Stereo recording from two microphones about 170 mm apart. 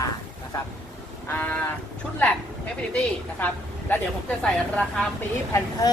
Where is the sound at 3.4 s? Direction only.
10° left (ahead or behind).